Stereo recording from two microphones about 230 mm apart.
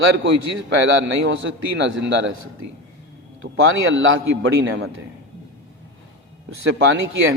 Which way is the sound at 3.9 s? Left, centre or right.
Right.